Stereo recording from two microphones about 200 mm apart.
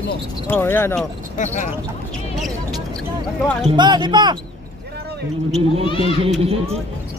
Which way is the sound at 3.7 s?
20° right (ahead or behind).